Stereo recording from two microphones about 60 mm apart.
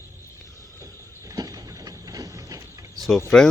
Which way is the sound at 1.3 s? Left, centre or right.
Right.